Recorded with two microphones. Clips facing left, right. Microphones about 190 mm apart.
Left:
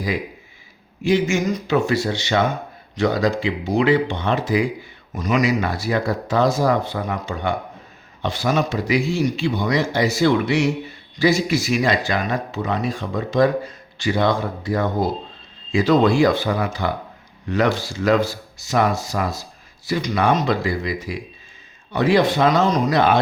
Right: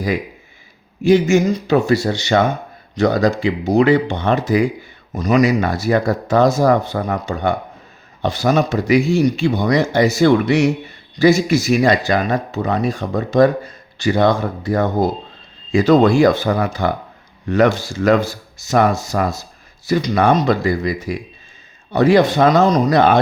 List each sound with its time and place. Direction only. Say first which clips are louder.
1.0 s speech: right 6 dB; 40° right (ahead or behind)